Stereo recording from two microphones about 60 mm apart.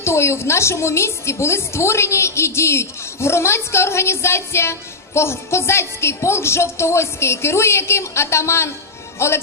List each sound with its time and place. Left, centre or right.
0.0 s a woman's voice: left